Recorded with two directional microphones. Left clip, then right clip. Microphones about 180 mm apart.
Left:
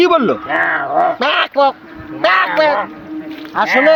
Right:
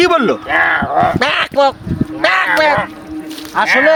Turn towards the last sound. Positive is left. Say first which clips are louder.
# right 1 dB
turn(degrees=-25)  # may be behind; listen again after turning